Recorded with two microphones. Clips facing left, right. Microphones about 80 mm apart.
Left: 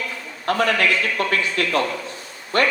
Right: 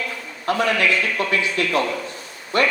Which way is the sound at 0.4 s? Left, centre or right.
Left.